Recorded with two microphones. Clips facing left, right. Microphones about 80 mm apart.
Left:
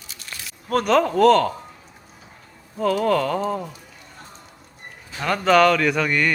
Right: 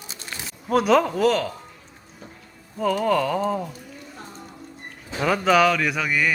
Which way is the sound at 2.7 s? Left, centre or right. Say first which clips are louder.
Left 1 dB; centre.